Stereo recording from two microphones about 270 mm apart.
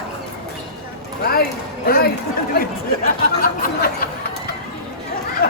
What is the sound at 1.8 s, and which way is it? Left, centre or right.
Speech, left.